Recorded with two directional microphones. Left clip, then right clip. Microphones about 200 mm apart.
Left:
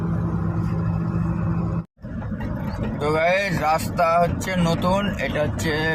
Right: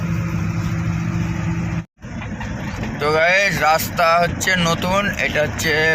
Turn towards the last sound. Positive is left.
turn(degrees=5)  # may be behind; listen again after turning